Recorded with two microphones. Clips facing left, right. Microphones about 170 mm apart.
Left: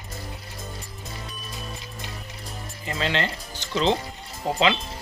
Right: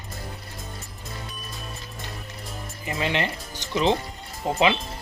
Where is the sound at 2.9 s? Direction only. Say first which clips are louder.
Even; 15° right (ahead or behind).